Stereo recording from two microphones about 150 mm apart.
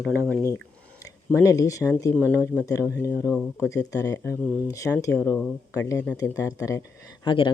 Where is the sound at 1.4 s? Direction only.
20° left (ahead or behind).